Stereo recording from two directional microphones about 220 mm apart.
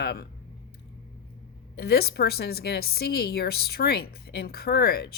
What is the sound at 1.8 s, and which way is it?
A woman's voice, 45° left (ahead or behind).